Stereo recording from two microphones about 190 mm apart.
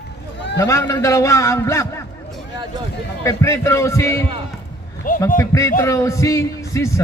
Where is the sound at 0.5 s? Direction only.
15° left (ahead or behind).